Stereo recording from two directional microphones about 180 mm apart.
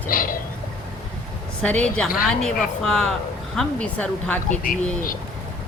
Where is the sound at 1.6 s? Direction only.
5° left (ahead or behind).